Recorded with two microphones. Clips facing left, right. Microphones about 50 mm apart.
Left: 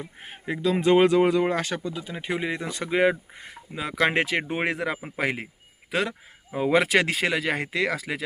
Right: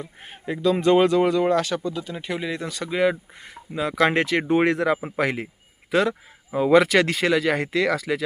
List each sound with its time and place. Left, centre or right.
0.0 s speech: centre